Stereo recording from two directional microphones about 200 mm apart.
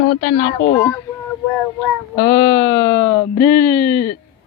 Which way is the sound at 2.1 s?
20° left (ahead or behind).